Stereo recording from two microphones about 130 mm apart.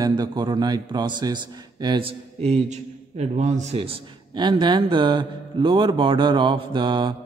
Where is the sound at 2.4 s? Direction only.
55° right (ahead or behind).